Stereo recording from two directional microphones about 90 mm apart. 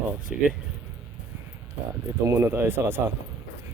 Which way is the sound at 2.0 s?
30° right (ahead or behind).